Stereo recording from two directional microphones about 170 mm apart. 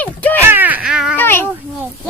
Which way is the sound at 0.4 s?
10° right (ahead or behind).